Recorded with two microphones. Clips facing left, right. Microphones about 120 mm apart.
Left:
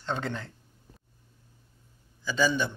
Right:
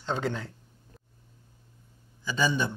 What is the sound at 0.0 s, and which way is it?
Speech, 5° right (ahead or behind).